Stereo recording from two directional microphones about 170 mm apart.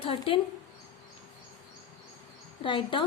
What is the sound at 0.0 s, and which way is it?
Speech, 35° left (ahead or behind).